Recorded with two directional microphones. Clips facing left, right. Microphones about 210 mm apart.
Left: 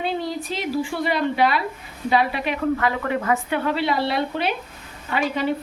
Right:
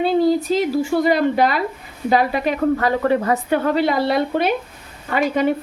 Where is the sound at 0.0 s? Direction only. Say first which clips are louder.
Right 10 dB; 40° right (ahead or behind).